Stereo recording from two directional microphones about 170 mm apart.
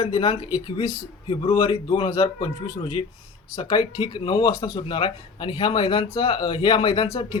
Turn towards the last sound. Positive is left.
turn(degrees=30)  # may be behind; listen again after turning